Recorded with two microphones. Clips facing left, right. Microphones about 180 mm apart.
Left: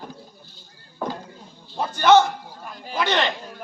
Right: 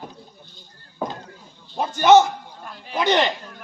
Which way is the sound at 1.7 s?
20° right (ahead or behind).